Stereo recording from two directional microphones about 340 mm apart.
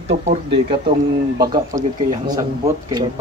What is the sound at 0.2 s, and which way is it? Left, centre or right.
Speech, centre.